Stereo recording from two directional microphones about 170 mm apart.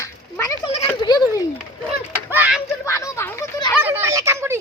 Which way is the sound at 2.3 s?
5° right (ahead or behind).